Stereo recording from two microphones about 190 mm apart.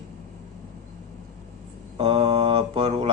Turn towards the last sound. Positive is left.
turn(degrees=-30)  # may be behind; listen again after turning